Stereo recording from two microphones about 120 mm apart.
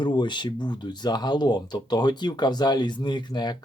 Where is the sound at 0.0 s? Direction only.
40° left (ahead or behind).